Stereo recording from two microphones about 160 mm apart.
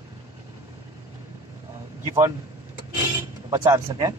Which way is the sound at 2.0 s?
20° right (ahead or behind).